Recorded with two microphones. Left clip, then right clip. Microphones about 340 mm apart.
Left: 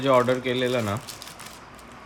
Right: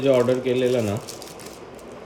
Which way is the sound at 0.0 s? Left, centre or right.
Centre.